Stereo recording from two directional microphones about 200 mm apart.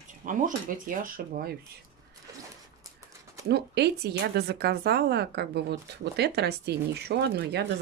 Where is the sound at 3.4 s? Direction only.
55° right (ahead or behind).